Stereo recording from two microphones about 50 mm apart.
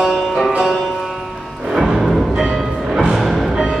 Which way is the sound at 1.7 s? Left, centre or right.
Centre.